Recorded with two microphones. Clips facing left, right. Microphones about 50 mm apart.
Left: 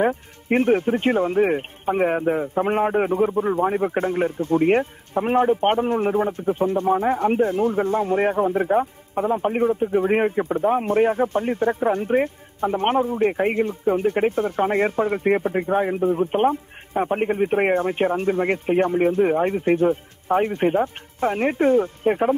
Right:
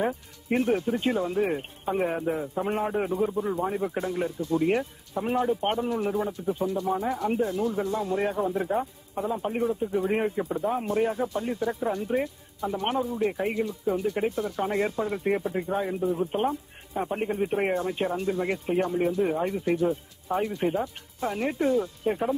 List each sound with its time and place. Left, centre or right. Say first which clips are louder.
0.0 s speech: left 7 dB; left